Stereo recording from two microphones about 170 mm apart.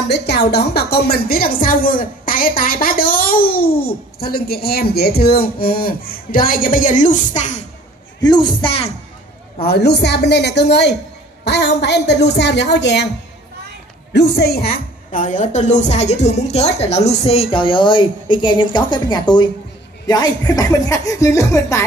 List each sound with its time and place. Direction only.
0.1 s a woman's voice: 75° left (ahead or behind); by 7.6 s 45° left (ahead or behind)
8.2 s speech: 25° left (ahead or behind)
9.7 s a woman's voice: 75° left (ahead or behind)
14.1 s a woman's voice: 80° left; by 21.8 s 15° left (ahead or behind)